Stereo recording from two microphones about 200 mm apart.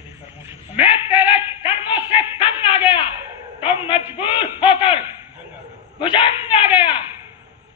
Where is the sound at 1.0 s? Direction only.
10° right (ahead or behind).